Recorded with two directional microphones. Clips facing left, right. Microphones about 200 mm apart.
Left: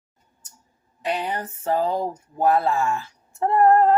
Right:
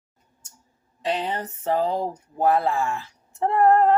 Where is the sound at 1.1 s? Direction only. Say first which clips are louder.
Even; 25° right (ahead or behind).